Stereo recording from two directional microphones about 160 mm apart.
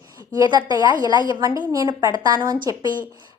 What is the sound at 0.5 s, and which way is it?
A woman's voice, 25° right (ahead or behind).